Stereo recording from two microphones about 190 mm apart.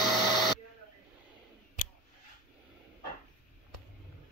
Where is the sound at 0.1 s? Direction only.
20° left (ahead or behind).